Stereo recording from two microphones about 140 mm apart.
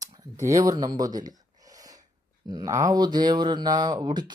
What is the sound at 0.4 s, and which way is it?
Speech, 25° right (ahead or behind).